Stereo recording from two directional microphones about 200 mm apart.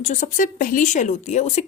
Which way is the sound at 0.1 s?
40° left (ahead or behind).